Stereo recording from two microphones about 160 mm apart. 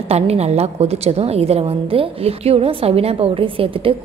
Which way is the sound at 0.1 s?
40° right (ahead or behind).